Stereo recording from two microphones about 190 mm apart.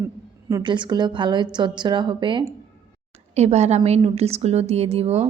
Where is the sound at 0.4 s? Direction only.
20° right (ahead or behind).